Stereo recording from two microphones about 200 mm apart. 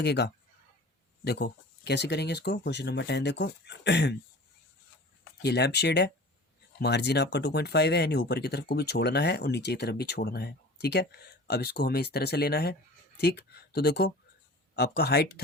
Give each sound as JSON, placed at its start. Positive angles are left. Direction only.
{"t": 0.0, "sound": "speech", "side_deg": 55}
{"t": 5.4, "sound": "speech", "side_deg": 55}